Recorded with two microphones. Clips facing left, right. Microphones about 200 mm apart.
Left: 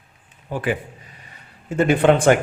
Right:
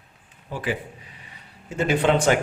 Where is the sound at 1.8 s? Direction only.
55° left (ahead or behind).